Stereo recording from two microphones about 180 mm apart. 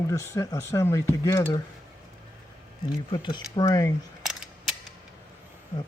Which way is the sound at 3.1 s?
25° left (ahead or behind).